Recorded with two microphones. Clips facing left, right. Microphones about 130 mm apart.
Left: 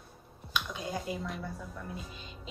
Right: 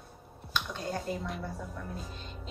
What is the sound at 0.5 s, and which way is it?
Speech, 10° left (ahead or behind).